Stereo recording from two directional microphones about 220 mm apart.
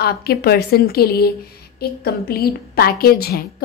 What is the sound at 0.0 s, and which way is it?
Speech, 45° left (ahead or behind).